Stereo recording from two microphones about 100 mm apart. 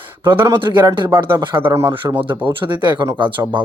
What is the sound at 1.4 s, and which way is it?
Speech, 55° right (ahead or behind).